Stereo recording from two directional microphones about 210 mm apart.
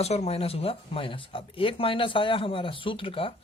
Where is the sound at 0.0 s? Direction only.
30° left (ahead or behind).